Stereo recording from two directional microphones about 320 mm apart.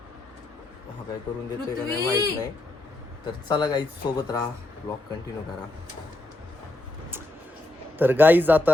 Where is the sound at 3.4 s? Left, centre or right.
Centre.